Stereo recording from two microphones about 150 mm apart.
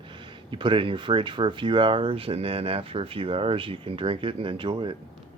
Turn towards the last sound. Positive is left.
turn(degrees=-35)  # may be behind; listen again after turning